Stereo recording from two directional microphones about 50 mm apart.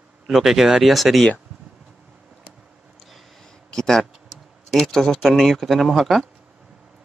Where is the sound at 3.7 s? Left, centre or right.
Centre.